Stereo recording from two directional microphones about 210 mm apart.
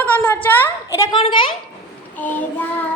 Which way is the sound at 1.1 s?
25° left (ahead or behind).